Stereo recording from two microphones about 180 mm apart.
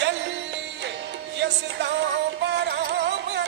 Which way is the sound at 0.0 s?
80° right.